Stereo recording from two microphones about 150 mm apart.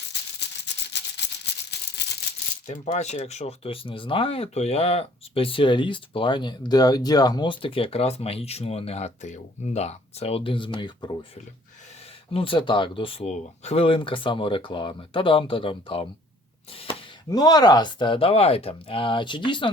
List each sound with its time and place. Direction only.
2.6 s speech: 45° left (ahead or behind); by 11.3 s 30° left (ahead or behind)
12.3 s speech: 35° left (ahead or behind)
17.2 s speech: 25° left (ahead or behind)